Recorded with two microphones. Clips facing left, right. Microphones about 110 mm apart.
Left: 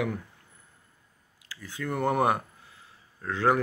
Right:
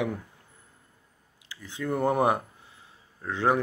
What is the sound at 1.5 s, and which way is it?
Speech, 20° right (ahead or behind).